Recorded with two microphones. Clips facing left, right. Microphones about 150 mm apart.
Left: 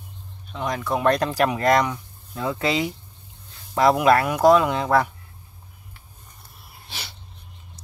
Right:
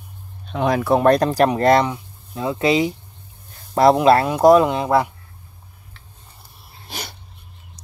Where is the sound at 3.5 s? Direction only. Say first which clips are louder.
Right 4 dB; 40° right (ahead or behind); by 5.1 s 20° right (ahead or behind).